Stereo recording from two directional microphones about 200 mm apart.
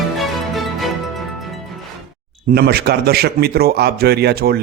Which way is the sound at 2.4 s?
50° right (ahead or behind).